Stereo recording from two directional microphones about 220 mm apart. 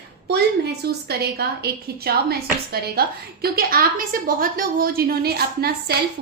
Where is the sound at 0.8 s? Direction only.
45° right (ahead or behind).